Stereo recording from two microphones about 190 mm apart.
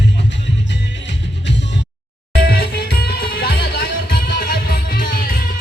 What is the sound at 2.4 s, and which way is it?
Music, 50° left (ahead or behind).